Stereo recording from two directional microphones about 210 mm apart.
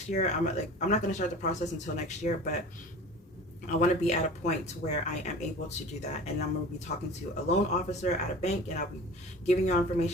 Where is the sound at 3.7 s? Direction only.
35° left (ahead or behind).